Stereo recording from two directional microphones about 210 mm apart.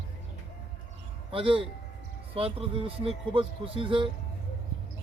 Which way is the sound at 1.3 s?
25° right (ahead or behind).